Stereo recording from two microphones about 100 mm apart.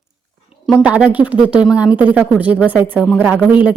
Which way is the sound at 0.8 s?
15° right (ahead or behind).